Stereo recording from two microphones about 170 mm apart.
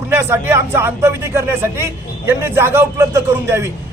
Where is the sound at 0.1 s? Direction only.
15° right (ahead or behind).